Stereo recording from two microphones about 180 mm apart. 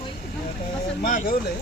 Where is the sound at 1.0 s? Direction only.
45° left (ahead or behind).